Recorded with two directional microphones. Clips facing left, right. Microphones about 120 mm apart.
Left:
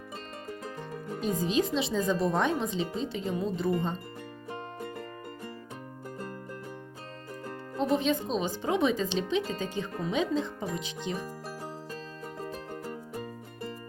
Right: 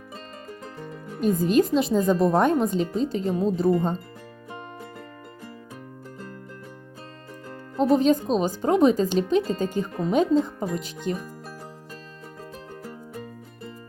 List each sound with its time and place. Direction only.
1.4 s speech: 50° right (ahead or behind)
7.8 s speech: 40° right (ahead or behind)